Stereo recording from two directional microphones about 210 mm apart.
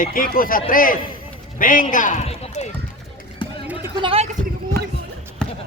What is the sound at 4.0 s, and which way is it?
Speech, 25° right (ahead or behind).